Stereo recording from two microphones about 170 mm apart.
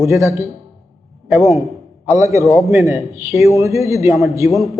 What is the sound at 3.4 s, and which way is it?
Speech, 20° right (ahead or behind).